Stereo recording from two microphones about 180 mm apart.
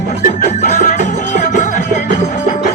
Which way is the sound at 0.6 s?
45° left (ahead or behind).